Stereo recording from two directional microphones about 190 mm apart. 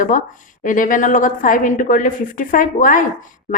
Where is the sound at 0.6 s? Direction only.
45° left (ahead or behind).